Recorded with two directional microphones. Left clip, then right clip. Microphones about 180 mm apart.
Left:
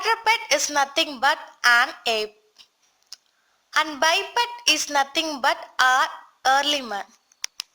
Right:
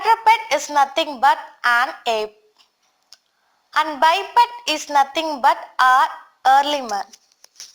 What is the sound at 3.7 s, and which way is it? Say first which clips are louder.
A woman's voice: right 4 dB; 20° left (ahead or behind).